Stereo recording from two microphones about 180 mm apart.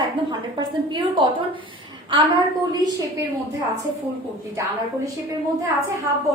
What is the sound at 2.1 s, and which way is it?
Speech, 30° right (ahead or behind).